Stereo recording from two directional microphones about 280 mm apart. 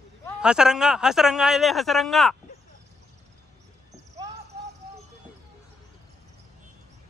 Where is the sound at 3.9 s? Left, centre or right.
Centre.